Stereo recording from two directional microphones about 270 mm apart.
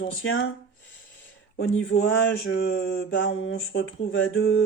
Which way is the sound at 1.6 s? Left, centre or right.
Left.